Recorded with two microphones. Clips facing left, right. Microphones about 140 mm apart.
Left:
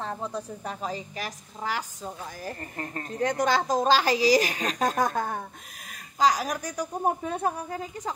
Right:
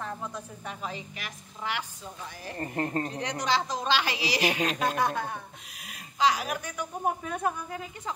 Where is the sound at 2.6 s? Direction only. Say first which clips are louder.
Right 6 dB; 30° right (ahead or behind).